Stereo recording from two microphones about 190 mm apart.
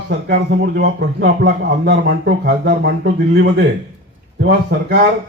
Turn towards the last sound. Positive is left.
turn(degrees=-60)  # may be behind; listen again after turning